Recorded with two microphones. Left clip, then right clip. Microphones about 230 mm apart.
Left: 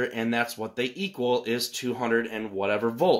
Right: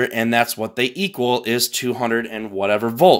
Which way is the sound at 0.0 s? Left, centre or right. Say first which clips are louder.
Right 9 dB; right.